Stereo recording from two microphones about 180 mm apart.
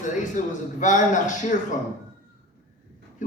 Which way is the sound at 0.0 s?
45° left (ahead or behind).